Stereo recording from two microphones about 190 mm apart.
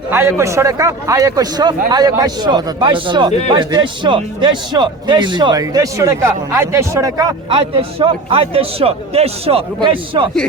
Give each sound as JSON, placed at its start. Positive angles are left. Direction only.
{"t": 0.1, "sound": "a man's voice", "side_deg": -15}